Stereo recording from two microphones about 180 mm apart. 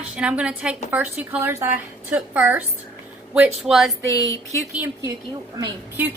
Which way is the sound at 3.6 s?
Centre (ahead or behind).